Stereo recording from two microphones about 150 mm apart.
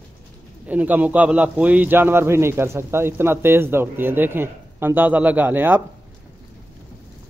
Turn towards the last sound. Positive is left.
turn(degrees=-15)  # may be behind; listen again after turning